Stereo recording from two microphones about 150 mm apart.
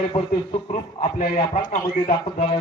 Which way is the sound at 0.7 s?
50° left (ahead or behind).